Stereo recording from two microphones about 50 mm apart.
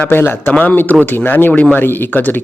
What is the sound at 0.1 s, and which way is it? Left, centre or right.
Speech, left.